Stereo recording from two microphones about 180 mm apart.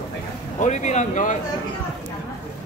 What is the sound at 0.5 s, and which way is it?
Speech, 40° left (ahead or behind).